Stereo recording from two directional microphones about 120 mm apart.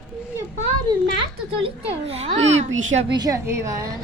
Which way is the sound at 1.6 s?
55° right (ahead or behind).